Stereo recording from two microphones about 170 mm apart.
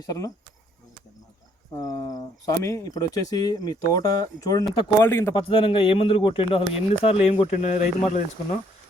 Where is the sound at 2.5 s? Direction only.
20° left (ahead or behind).